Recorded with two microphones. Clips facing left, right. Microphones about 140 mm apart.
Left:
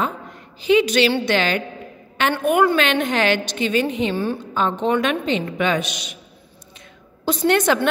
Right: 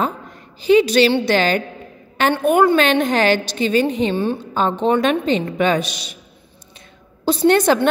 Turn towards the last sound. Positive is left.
turn(degrees=-35)  # may be behind; listen again after turning